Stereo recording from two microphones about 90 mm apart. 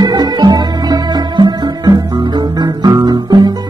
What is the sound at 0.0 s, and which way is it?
Music, 50° right (ahead or behind).